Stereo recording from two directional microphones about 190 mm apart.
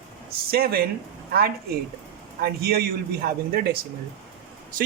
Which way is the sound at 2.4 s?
55° right (ahead or behind).